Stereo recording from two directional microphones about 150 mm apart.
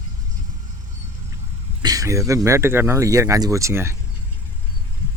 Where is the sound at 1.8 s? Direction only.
25° right (ahead or behind).